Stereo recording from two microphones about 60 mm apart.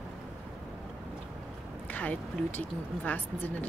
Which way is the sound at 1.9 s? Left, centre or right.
Left.